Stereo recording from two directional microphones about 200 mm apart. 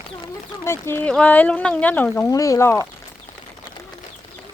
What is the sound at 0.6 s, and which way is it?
Speech, 10° left (ahead or behind).